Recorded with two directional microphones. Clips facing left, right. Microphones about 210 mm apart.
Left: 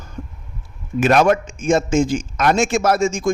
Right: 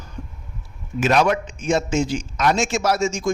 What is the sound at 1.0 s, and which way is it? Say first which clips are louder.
Speech: left 4 dB; 55° left (ahead or behind).